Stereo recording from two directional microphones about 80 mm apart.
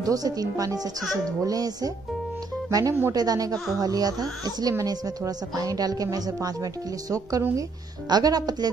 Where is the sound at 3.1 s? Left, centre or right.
Right.